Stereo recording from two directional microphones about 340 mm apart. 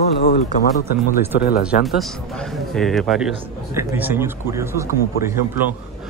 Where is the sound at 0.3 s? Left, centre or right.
Left.